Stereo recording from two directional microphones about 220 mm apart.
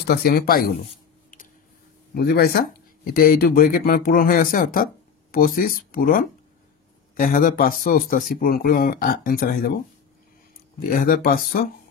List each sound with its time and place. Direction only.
0.0 s speech: 45° left (ahead or behind)
2.1 s speech: 45° left (ahead or behind)
10.8 s speech: 40° left (ahead or behind)